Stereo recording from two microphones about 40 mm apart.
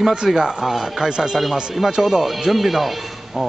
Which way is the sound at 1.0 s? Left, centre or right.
Centre.